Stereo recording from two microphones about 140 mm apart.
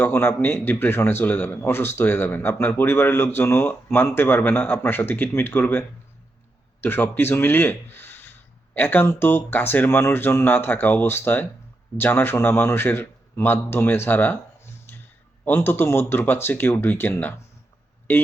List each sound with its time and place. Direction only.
0.0 s a man's voice: 15° left (ahead or behind)
6.8 s a man's voice: 15° left (ahead or behind)
14.9 s a sound: 15° left (ahead or behind)
15.4 s a man's voice: 15° left (ahead or behind)